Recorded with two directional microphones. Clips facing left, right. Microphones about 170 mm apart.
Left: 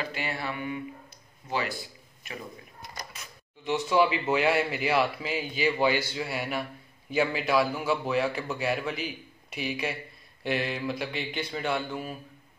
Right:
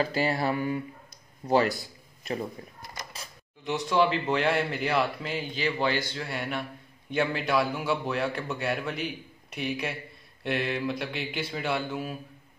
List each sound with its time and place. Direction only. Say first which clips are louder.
0.0 s speech: right 7 dB; 40° right (ahead or behind)
3.1 s a sound: right 3 dB; 30° right (ahead or behind)
3.6 s speech: left 1 dB; centre (ahead or behind)